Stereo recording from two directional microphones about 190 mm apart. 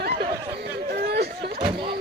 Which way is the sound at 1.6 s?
25° right (ahead or behind).